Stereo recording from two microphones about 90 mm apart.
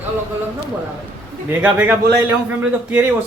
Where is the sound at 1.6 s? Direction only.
20° right (ahead or behind).